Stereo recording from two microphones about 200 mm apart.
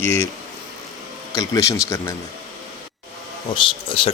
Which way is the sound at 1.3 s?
15° left (ahead or behind).